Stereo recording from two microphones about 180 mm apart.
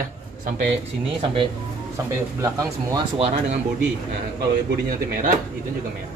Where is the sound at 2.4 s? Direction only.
15° right (ahead or behind).